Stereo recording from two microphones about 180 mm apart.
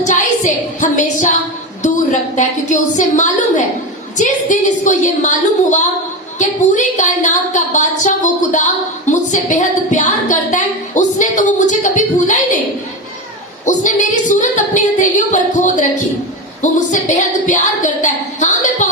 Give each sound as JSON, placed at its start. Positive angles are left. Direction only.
{"t": 0.8, "sound": "a woman's voice", "side_deg": 40}
{"t": 13.7, "sound": "a woman's voice", "side_deg": 45}